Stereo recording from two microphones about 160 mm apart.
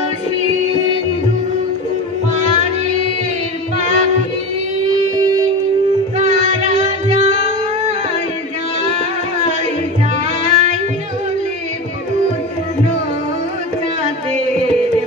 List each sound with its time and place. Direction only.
2.3 s music: 45° right (ahead or behind)
6.1 s music: 45° right (ahead or behind)
10.5 s music: 45° right (ahead or behind)